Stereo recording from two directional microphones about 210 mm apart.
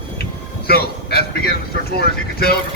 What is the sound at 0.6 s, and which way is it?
A man's voice, 45° left (ahead or behind).